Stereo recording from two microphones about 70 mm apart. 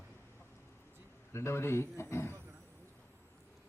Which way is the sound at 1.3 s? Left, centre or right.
Left.